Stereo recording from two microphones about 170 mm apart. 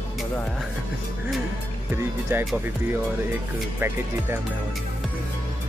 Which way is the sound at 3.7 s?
15° right (ahead or behind).